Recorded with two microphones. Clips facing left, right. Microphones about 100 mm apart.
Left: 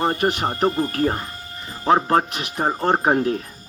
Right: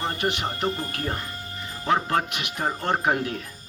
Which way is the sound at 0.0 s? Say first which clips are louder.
Left 6 dB; 45° left (ahead or behind).